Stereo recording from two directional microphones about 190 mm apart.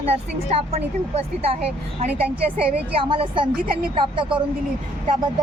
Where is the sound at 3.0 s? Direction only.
25° right (ahead or behind).